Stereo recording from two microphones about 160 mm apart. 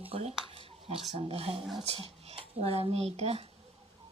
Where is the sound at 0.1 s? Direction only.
40° right (ahead or behind).